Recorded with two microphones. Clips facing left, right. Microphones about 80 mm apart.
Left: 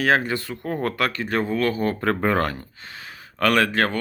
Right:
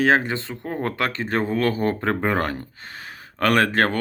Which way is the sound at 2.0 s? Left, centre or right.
Centre.